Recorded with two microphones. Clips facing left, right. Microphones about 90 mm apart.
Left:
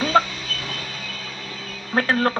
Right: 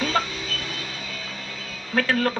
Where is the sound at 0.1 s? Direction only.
30° left (ahead or behind).